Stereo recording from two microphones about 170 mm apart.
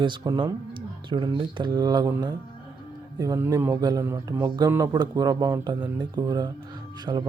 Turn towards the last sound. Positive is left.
turn(degrees=-25)  # may be behind; listen again after turning